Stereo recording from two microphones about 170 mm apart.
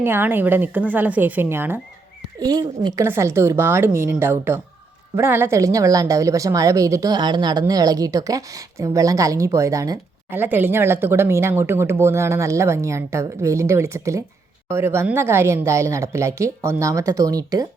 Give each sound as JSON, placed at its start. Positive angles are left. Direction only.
{"t": 0.0, "sound": "a woman's voice", "side_deg": -10}
{"t": 2.4, "sound": "a woman's voice", "side_deg": -25}